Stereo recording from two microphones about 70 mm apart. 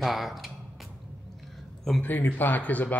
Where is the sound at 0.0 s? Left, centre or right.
Centre.